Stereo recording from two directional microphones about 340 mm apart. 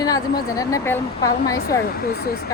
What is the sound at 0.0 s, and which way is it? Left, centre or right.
Speech, centre.